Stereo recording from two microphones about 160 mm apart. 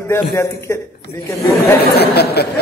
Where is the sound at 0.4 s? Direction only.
15° left (ahead or behind).